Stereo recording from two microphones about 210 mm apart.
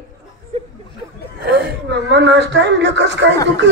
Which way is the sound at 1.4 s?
55° right (ahead or behind).